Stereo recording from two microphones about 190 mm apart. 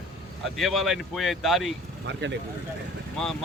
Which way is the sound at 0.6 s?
Centre (ahead or behind).